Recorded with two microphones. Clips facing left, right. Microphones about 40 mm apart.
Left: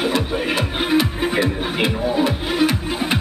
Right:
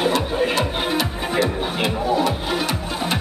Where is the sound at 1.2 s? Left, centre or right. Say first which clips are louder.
Left 1 dB; centre.